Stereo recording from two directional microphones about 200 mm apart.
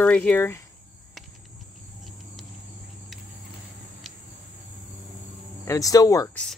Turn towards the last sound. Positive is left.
turn(degrees=15)  # may be behind; listen again after turning